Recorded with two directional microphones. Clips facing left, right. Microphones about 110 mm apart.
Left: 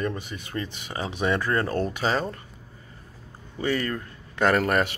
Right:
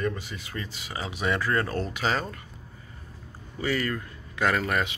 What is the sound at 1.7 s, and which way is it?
Speech, 40° left (ahead or behind).